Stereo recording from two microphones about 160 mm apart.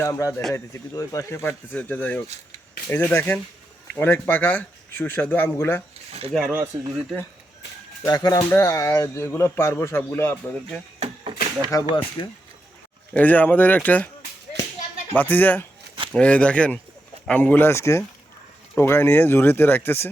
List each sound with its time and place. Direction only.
0.0 s speech: 20° left (ahead or behind)
6.3 s speech: 5° left (ahead or behind)
6.7 s speech: 35° right (ahead or behind)
8.0 s speech: 25° left (ahead or behind)
11.0 s chop: 40° right (ahead or behind)
11.7 s speech: 20° left (ahead or behind)
13.1 s speech: 10° left (ahead or behind)
15.1 s speech: 10° left (ahead or behind)